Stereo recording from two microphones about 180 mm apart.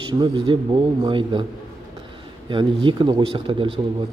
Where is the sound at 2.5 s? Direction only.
25° right (ahead or behind).